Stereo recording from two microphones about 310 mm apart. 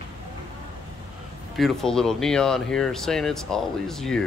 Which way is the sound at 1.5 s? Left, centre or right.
Centre.